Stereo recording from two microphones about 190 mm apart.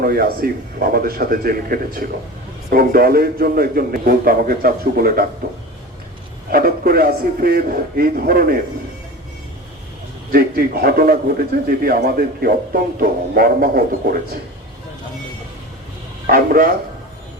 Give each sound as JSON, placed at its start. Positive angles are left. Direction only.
{"t": 0.0, "sound": "a man's voice", "side_deg": -50}
{"t": 6.5, "sound": "a man's voice", "side_deg": -50}
{"t": 10.3, "sound": "a man's voice", "side_deg": -50}
{"t": 16.2, "sound": "speech", "side_deg": -50}